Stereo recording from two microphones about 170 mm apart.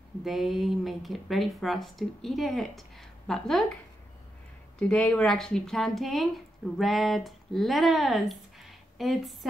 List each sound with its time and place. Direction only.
0.2 s speech: centre (ahead or behind)
4.7 s speech: 5° left (ahead or behind)